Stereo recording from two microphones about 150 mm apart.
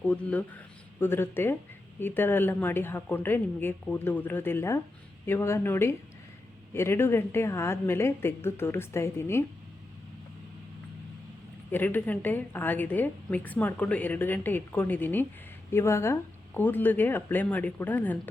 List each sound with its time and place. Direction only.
0.0 s a woman's voice: 10° left (ahead or behind)
11.7 s a woman's voice: 10° left (ahead or behind)